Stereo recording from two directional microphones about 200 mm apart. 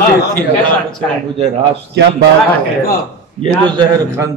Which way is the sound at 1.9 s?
55° right (ahead or behind).